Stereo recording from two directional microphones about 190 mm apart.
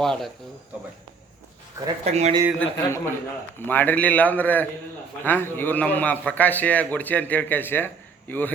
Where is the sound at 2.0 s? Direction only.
35° right (ahead or behind).